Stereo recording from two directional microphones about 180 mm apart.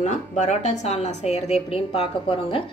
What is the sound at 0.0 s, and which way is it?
A woman's voice, 40° left (ahead or behind).